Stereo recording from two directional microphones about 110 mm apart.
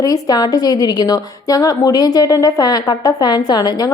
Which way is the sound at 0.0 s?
35° left (ahead or behind).